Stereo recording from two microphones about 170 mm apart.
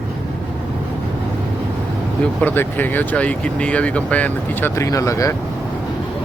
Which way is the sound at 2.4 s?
10° left (ahead or behind).